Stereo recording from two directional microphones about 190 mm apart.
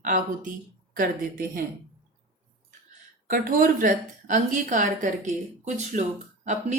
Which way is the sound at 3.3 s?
45° right (ahead or behind).